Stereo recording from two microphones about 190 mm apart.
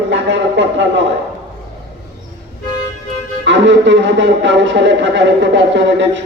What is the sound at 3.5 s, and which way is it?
Speech, 70° right (ahead or behind).